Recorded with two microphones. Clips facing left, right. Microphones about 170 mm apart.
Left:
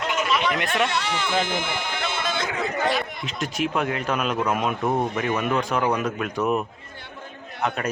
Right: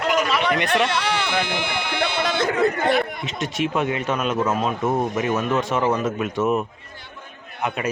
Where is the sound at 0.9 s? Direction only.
45° left (ahead or behind).